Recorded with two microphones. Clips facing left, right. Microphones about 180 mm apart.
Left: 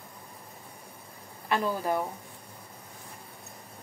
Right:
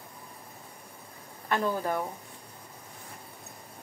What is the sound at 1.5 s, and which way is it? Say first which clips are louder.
Speech: even; 10° left (ahead or behind).